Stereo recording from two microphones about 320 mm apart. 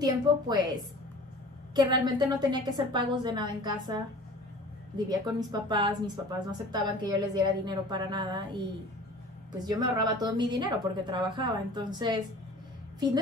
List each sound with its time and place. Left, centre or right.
0.0 s a woman's voice: centre
1.8 s a woman's voice: centre